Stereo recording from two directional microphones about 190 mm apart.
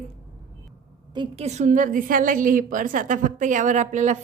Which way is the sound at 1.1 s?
30° right (ahead or behind).